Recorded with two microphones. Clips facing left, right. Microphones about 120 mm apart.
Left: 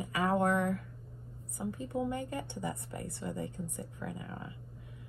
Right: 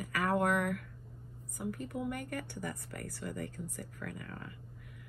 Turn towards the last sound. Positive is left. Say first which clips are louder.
# left 2 dB
turn(degrees=20)  # may be behind; listen again after turning